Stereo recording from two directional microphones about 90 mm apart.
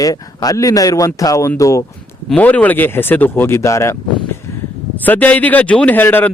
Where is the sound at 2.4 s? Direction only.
15° left (ahead or behind); by 3.9 s 35° left (ahead or behind).